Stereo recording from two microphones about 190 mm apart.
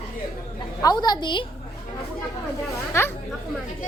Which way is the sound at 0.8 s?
20° left (ahead or behind).